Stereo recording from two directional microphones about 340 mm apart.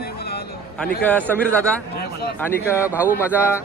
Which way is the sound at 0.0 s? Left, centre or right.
Left.